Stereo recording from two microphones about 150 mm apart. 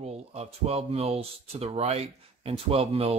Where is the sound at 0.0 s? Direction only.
45° right (ahead or behind).